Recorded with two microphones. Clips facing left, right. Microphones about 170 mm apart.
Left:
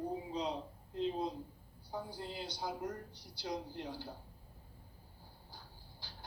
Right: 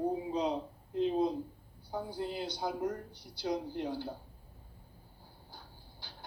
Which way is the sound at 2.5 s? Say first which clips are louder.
Right 6 dB; 60° right (ahead or behind).